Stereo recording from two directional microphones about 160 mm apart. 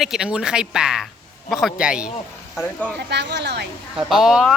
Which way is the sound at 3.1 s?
90° right.